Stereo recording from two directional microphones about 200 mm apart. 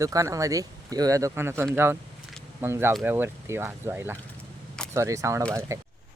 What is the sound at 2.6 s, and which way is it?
Speech, 10° right (ahead or behind).